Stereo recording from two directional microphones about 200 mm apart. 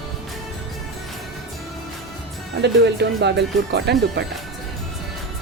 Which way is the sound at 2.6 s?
60° right (ahead or behind).